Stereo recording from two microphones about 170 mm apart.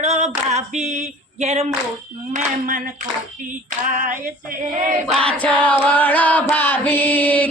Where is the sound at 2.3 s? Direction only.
50° right (ahead or behind).